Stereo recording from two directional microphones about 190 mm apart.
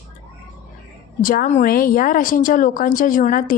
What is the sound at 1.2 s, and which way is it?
A woman's voice, 45° left (ahead or behind).